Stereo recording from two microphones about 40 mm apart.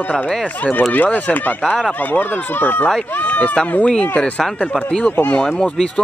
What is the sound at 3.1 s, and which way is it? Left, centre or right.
Speech, left.